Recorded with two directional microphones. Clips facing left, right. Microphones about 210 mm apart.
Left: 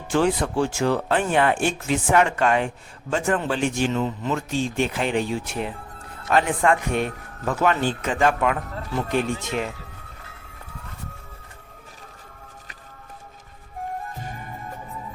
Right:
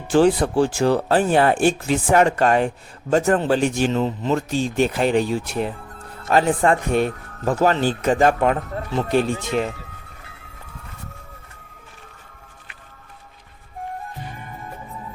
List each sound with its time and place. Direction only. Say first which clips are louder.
0.1 s speech: right 5 dB; 35° right (ahead or behind)